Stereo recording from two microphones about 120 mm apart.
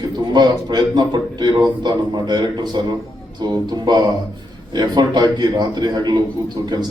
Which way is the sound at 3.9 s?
35° right (ahead or behind).